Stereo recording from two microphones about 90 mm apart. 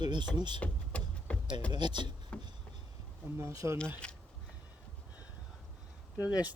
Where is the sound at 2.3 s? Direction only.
10° left (ahead or behind).